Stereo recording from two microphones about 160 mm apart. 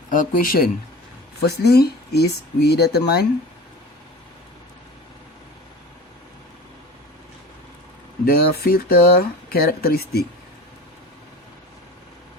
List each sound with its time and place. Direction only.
0.1 s speech: 60° left (ahead or behind)
1.5 s speech: 85° left
8.2 s speech: 75° left (ahead or behind)